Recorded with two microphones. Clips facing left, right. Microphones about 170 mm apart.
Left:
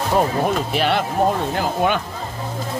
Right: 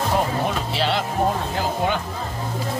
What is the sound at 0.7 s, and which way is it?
Speech, 55° left (ahead or behind).